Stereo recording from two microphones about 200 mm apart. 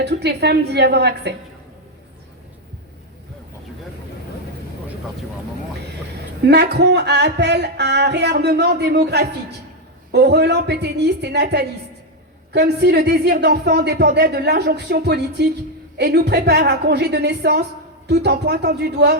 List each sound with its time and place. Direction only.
0.0 s speech: 55° right (ahead or behind)
6.4 s speech: 55° right (ahead or behind)